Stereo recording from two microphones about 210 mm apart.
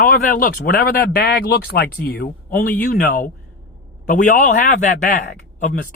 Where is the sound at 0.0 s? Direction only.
40° left (ahead or behind).